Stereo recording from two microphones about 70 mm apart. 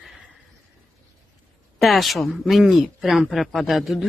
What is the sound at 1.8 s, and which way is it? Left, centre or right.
Speech, centre.